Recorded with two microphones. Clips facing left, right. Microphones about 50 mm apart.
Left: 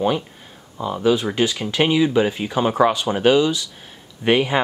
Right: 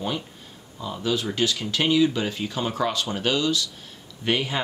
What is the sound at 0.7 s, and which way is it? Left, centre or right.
Speech, left.